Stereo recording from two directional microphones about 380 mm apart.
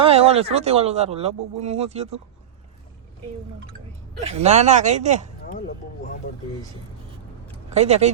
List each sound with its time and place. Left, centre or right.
0.0 s speech: centre
4.2 s speech: centre
6.3 s speech: left
7.7 s speech: centre